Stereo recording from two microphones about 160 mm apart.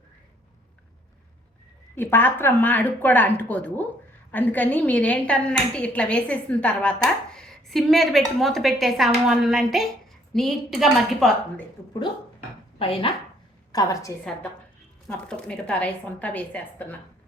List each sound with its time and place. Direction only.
2.0 s a woman's voice: 15° left (ahead or behind)
12.8 s speech: 35° left (ahead or behind)
13.7 s a woman's voice: 25° left (ahead or behind)
15.0 s a woman's voice: 5° left (ahead or behind)